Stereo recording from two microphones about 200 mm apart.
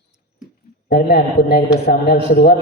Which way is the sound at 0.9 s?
50° left (ahead or behind).